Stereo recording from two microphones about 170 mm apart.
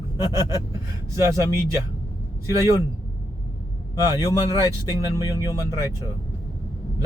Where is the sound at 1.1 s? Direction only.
15° right (ahead or behind).